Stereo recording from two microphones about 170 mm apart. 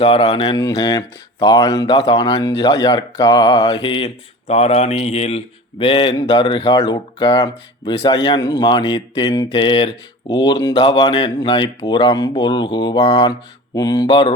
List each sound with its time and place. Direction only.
0.0 s speech: 35° left (ahead or behind)
5.8 s speech: 30° left (ahead or behind)